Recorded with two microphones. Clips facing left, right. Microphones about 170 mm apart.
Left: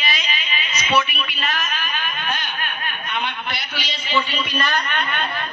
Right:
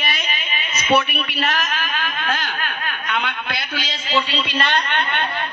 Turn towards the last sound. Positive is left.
turn(degrees=-30)  # may be behind; listen again after turning